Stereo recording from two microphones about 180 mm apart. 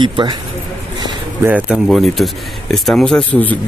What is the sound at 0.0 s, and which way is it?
Speech, 25° right (ahead or behind).